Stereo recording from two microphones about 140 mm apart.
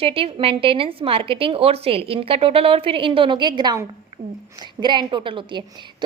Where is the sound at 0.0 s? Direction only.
40° right (ahead or behind).